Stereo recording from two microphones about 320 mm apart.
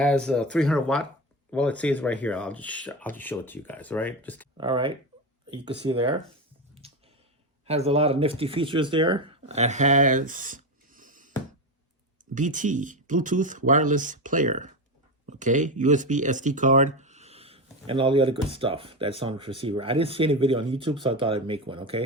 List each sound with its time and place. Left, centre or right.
0.0 s speech: centre
4.5 s speech: centre
6.8 s a sound: centre
7.7 s speech: centre